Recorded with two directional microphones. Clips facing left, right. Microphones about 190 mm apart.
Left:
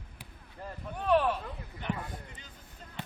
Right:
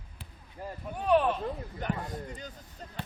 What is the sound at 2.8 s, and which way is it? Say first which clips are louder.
Basketball bounce: right 5 dB; 40° right (ahead or behind).